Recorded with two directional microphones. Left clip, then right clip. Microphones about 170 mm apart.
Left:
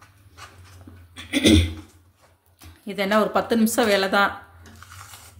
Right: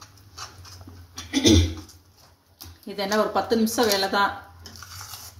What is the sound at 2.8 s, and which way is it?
Speech, 70° left (ahead or behind).